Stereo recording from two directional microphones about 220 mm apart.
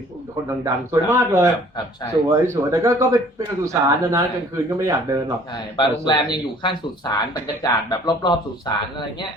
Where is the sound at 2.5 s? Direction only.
15° right (ahead or behind).